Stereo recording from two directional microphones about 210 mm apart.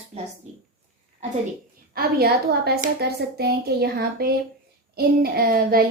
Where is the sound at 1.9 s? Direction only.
45° right (ahead or behind).